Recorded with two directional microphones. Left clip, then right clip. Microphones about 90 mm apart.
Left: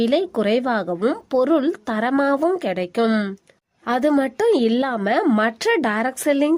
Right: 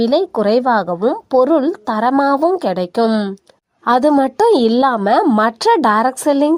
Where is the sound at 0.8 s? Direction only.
10° right (ahead or behind).